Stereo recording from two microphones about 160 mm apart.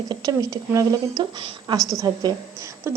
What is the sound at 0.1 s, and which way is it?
A woman's voice, 25° right (ahead or behind).